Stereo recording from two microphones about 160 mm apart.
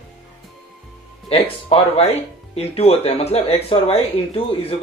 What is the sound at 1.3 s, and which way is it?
Speech, 40° left (ahead or behind).